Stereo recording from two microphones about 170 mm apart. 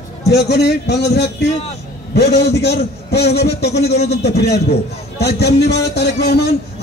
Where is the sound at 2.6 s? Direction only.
75° left (ahead or behind).